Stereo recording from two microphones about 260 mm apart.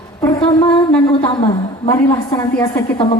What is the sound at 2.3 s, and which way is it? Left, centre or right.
Speech, centre.